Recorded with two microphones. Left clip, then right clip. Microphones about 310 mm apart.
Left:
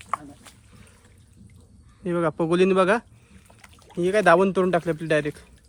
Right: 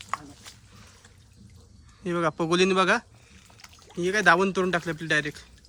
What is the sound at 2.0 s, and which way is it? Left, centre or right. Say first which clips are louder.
Speech: left 2 dB; centre.